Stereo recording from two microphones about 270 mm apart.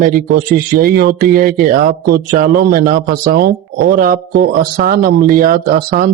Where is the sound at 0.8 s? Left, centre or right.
Right.